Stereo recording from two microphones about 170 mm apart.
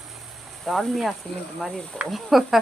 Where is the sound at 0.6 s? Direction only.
Centre (ahead or behind).